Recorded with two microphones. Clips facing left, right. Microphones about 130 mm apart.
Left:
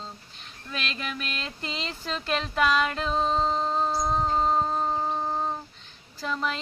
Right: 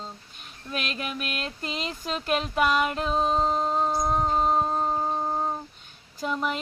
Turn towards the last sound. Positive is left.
turn(degrees=-15)  # may be behind; listen again after turning